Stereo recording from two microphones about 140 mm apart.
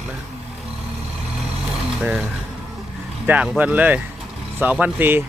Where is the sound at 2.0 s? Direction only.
10° right (ahead or behind).